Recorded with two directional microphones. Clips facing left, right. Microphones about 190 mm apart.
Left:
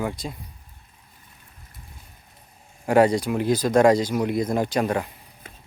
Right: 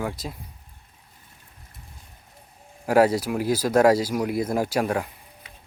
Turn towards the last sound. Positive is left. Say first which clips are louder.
# left 4 dB
turn(degrees=50)  # may be behind; listen again after turning